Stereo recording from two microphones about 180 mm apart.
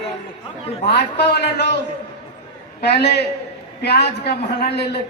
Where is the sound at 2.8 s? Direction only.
65° left (ahead or behind).